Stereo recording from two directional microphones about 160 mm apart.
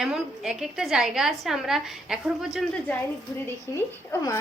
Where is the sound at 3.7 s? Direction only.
20° left (ahead or behind).